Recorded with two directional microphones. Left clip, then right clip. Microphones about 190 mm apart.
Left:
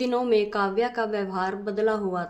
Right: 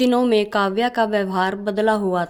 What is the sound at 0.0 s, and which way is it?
A woman's voice, 45° right (ahead or behind).